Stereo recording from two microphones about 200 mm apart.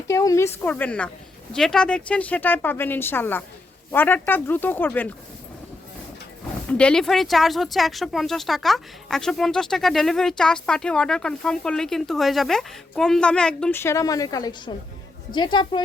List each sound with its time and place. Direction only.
0.1 s speech: 15° left (ahead or behind)
6.7 s speech: 5° left (ahead or behind); by 15.8 s 25° left (ahead or behind)